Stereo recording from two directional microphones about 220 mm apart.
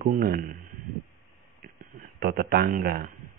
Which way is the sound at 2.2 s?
45° right (ahead or behind).